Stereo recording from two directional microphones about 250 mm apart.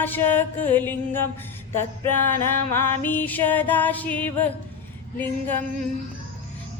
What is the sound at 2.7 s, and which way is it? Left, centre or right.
Music, centre.